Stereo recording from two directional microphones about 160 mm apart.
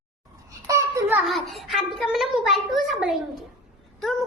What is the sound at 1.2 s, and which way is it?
A child's voice, centre (ahead or behind).